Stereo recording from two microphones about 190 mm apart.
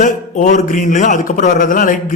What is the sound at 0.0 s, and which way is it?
A man's voice, 40° left (ahead or behind).